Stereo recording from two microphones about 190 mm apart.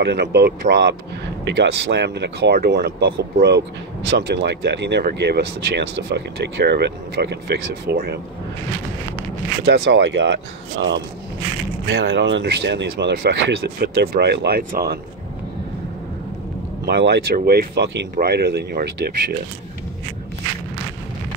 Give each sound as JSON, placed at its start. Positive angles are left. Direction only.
{"t": 0.0, "sound": "speech", "side_deg": -60}
{"t": 9.7, "sound": "speech", "side_deg": -60}
{"t": 16.8, "sound": "speech", "side_deg": -65}